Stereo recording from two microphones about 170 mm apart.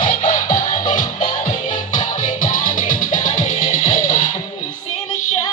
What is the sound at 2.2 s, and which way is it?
Music, 50° left (ahead or behind).